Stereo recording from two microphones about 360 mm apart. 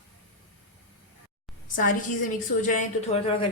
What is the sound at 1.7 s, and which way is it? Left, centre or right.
A woman's voice, left.